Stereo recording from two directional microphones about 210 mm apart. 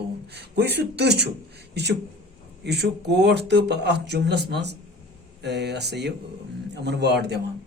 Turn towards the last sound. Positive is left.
turn(degrees=-50)  # may be behind; listen again after turning